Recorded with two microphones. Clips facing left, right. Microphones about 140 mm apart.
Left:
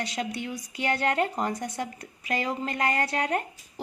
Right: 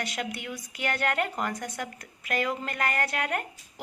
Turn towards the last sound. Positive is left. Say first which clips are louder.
# left 3 dB
turn(degrees=25)  # may be behind; listen again after turning